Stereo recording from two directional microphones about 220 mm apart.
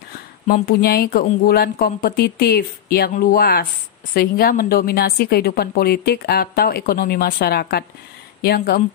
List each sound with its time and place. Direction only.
0.5 s a woman's voice: 40° left (ahead or behind)